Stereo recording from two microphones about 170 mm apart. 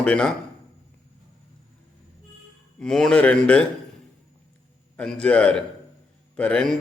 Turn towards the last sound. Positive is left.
turn(degrees=5)  # may be behind; listen again after turning